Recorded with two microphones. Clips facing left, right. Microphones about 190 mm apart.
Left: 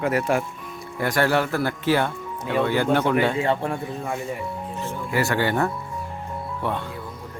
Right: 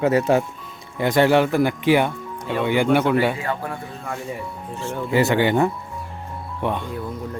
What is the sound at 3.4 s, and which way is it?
Speech, 25° left (ahead or behind).